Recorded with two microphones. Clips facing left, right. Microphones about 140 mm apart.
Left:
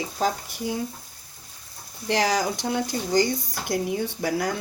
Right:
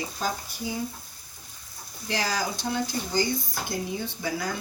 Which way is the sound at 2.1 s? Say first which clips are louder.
Left 6 dB; 75° left (ahead or behind).